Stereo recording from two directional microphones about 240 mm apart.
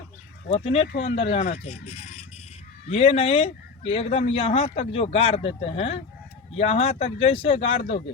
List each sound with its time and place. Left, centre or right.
0.4 s speech: left